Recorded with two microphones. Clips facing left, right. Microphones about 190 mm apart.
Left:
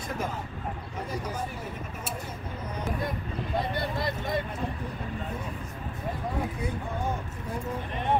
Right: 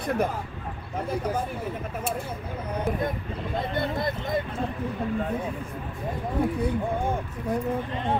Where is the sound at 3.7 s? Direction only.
50° right (ahead or behind).